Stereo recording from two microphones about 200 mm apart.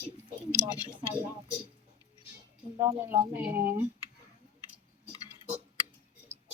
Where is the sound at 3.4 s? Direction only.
10° right (ahead or behind).